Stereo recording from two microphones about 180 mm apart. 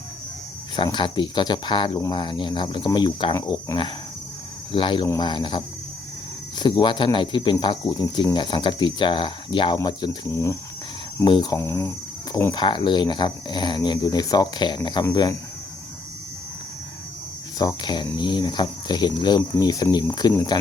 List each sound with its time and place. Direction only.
0.8 s speech: 25° left (ahead or behind)
17.6 s speech: 25° left (ahead or behind)